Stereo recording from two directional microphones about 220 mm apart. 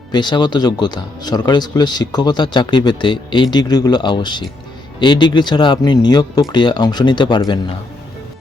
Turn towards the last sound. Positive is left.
turn(degrees=20)  # may be behind; listen again after turning